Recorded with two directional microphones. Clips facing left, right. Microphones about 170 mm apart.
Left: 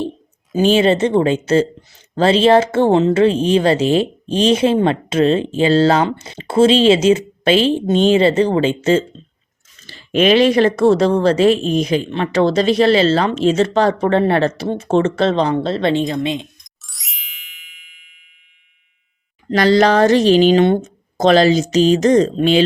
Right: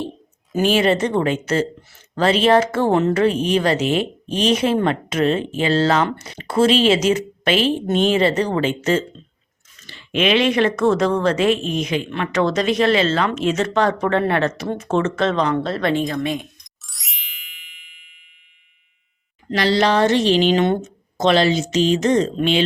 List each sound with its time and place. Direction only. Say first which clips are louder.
0.6 s a woman's voice: left 4 dB; 30° left (ahead or behind)
16.6 s ding: even; centre (ahead or behind)
19.5 s a woman's voice: left 5 dB; 45° left (ahead or behind)